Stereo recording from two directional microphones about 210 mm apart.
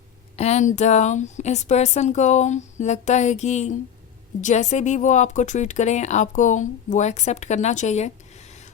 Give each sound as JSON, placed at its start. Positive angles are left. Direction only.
{"t": 0.3, "sound": "speech", "side_deg": 30}